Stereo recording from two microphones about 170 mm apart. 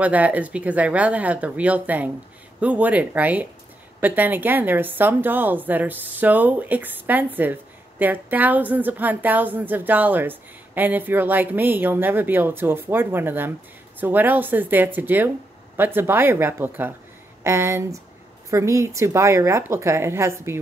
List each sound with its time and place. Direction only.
0.0 s a woman's voice: 10° right (ahead or behind)